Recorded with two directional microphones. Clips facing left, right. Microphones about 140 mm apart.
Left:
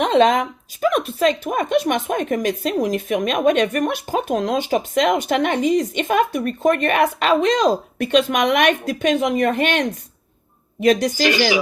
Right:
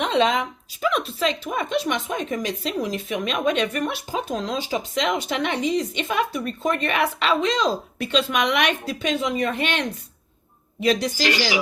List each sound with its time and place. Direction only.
0.0 s speech: 45° left (ahead or behind)